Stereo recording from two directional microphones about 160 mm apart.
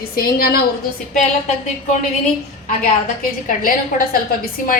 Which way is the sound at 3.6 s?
60° left (ahead or behind).